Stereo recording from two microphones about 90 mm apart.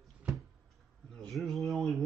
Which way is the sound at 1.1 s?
Centre (ahead or behind).